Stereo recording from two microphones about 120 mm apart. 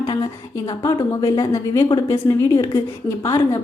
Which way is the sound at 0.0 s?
30° left (ahead or behind).